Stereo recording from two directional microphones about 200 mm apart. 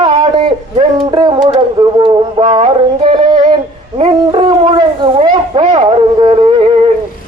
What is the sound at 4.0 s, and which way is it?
Dog, 25° right (ahead or behind).